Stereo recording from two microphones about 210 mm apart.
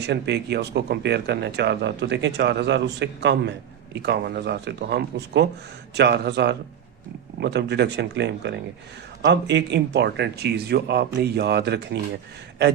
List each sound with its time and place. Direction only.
0.0 s speech: 55° right (ahead or behind)